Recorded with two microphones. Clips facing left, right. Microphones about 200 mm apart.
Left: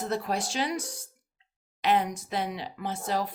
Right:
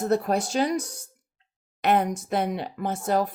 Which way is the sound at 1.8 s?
55° right (ahead or behind).